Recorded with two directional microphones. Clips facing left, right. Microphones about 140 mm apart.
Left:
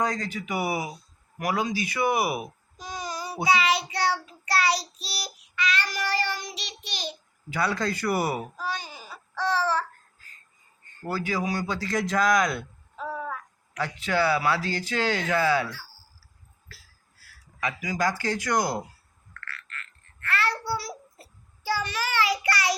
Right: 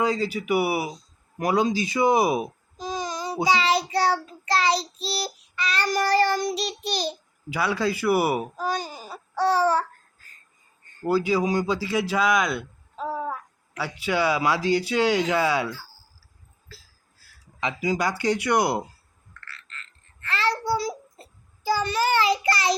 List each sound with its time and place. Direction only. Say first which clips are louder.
0.0 s speech: right 4 dB; 10° right (ahead or behind)
0.9 s speech: right 3 dB; 25° right (ahead or behind)
5.1 s child singing: right 2 dB; 30° right (ahead or behind)
7.5 s speech: right 2 dB; 10° right (ahead or behind)
8.5 s speech: right 5 dB; 40° right (ahead or behind)
11.0 s speech: right 7 dB; 15° right (ahead or behind)
13.0 s a sound: right 4 dB; 25° right (ahead or behind)
13.7 s speech: right 1 dB; 10° right (ahead or behind)
17.6 s speech: right 2 dB; 25° right (ahead or behind)
19.5 s a sound: left 3 dB; 25° right (ahead or behind)
21.7 s child singing: right 6 dB; 25° right (ahead or behind)